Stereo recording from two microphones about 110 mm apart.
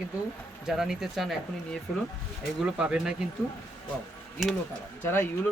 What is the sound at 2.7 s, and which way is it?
Speech, 5° right (ahead or behind).